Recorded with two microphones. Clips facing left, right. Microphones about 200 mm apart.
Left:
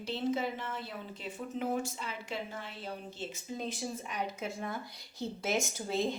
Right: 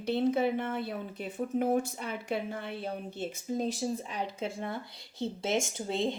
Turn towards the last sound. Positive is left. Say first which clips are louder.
# right 2 dB
turn(degrees=-25)  # may be behind; listen again after turning